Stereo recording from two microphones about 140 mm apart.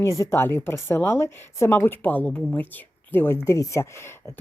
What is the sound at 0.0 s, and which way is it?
A woman's voice, 20° left (ahead or behind).